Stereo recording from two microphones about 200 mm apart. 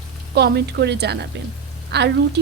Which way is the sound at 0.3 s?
55° right (ahead or behind).